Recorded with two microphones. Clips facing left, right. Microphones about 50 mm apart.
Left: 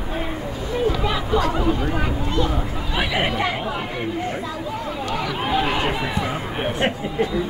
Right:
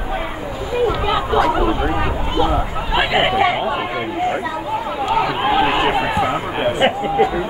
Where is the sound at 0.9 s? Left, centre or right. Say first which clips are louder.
Right 4 dB; right.